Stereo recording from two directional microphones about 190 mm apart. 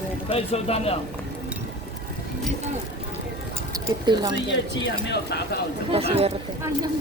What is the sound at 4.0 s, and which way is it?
Speech, 25° right (ahead or behind).